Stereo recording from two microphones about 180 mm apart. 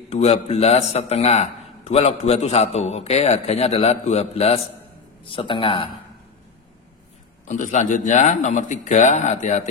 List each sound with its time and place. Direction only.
0.1 s a man's voice: 35° left (ahead or behind)
7.4 s speech: 45° left (ahead or behind)